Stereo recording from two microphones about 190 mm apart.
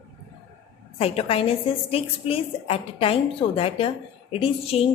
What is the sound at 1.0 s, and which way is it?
A woman's voice, 30° left (ahead or behind).